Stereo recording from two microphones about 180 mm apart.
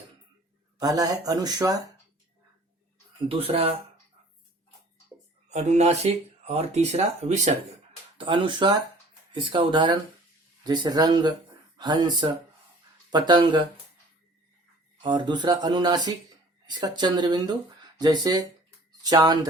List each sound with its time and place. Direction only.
0.8 s speech: 20° right (ahead or behind)
3.2 s speech: 30° right (ahead or behind)
5.5 s speech: 40° right (ahead or behind)
8.2 s speech: 25° right (ahead or behind)
15.0 s speech: 25° right (ahead or behind)